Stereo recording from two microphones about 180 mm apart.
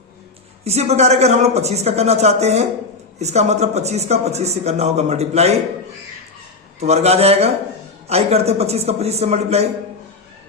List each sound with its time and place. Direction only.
0.6 s a man's voice: 35° right (ahead or behind)
6.7 s a man's voice: 35° right (ahead or behind)